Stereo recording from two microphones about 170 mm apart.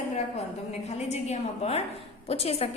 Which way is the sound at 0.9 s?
40° left (ahead or behind).